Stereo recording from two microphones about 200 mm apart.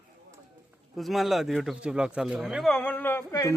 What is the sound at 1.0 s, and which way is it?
Speech, centre (ahead or behind).